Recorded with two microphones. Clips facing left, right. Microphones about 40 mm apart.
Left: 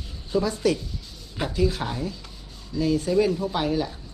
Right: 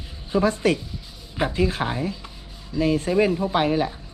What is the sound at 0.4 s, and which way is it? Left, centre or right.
Speech, right.